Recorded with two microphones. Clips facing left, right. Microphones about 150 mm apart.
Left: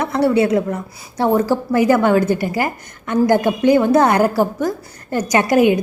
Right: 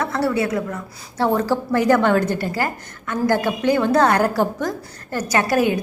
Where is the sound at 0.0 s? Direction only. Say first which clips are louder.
Left 5 dB; 20° left (ahead or behind).